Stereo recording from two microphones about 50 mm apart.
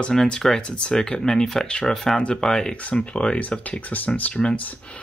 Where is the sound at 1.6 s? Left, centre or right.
Centre.